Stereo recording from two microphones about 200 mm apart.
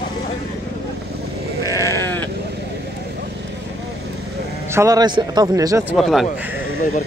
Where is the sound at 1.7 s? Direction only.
15° left (ahead or behind).